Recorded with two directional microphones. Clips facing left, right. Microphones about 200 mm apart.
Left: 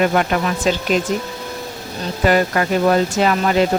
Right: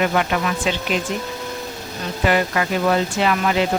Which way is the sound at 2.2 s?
40° left (ahead or behind).